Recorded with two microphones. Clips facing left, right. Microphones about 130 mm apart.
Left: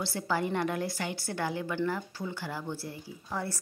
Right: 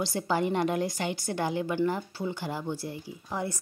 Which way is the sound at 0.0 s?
20° right (ahead or behind).